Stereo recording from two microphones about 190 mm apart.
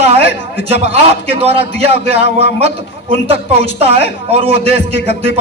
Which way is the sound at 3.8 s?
35° right (ahead or behind).